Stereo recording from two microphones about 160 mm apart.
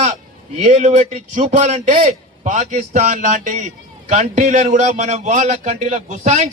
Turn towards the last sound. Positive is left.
turn(degrees=-50)  # may be behind; listen again after turning